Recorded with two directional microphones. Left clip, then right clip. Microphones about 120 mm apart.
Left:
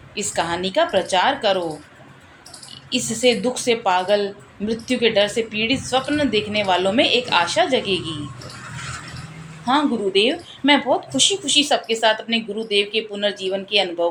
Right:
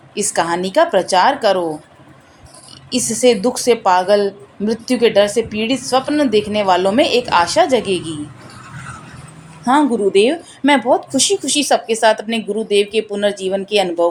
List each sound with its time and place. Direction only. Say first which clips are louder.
0.3 s a woman's voice: right 5 dB; 45° right (ahead or behind)
2.9 s a woman's voice: right 5 dB; 45° right (ahead or behind)
9.6 s a woman's voice: right 5 dB; 50° right (ahead or behind)